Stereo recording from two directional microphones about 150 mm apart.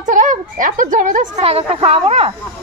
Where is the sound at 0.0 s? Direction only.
60° right (ahead or behind).